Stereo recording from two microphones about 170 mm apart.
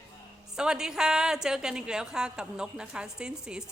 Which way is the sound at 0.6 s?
5° right (ahead or behind).